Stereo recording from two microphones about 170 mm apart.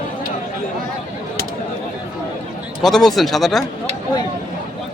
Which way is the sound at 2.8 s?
Centre (ahead or behind).